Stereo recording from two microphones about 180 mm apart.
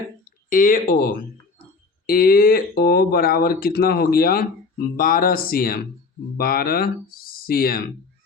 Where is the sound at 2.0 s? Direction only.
55° left (ahead or behind).